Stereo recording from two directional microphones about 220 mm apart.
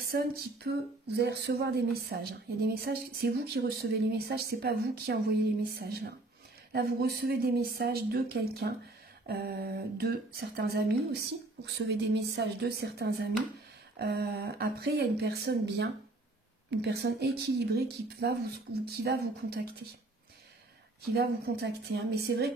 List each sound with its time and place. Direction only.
0.0 s speech: 45° right (ahead or behind)
21.1 s speech: 45° right (ahead or behind)